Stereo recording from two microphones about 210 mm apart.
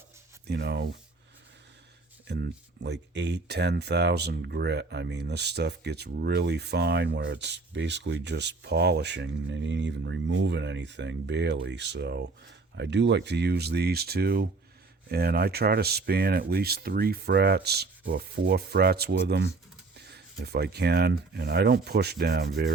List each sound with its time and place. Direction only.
0.4 s speech: 55° right (ahead or behind)
2.2 s speech: 50° right (ahead or behind)